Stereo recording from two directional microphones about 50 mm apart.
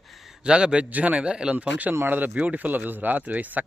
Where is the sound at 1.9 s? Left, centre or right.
Right.